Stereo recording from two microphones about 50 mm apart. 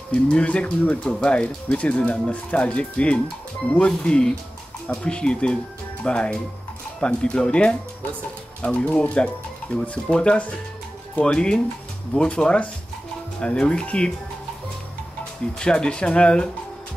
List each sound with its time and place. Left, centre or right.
0.1 s speech: left
15.6 s speech: centre